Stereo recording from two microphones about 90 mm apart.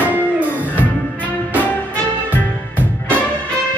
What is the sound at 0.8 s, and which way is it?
Music, 20° left (ahead or behind).